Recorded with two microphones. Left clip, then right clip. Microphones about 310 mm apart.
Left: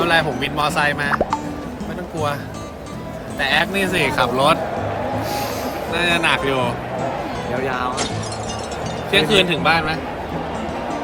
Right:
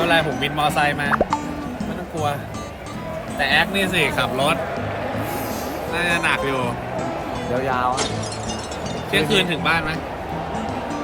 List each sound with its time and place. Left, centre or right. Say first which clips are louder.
0.0 s speech: left 1 dB; centre
3.3 s speech: even; centre
5.9 s speech: left 2 dB; centre
7.7 s speech: right 1 dB; centre
9.1 s speech: left 4 dB; centre